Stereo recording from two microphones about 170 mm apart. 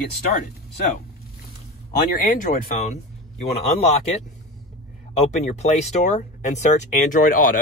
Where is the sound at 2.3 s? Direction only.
45° left (ahead or behind).